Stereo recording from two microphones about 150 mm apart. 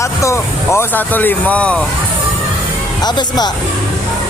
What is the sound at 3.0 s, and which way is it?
Speech, 30° left (ahead or behind).